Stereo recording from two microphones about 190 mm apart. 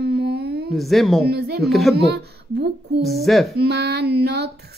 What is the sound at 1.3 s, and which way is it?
Speech, 60° right (ahead or behind).